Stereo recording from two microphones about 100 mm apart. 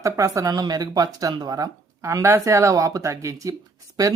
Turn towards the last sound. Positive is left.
turn(degrees=-35)  # may be behind; listen again after turning